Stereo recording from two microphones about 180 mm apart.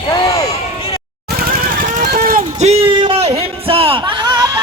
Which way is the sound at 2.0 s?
50° right (ahead or behind).